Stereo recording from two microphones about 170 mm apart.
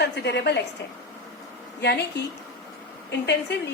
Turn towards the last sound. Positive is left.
turn(degrees=85)